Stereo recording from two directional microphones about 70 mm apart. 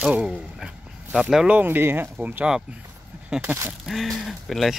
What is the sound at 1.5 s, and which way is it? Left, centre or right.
Speech, right.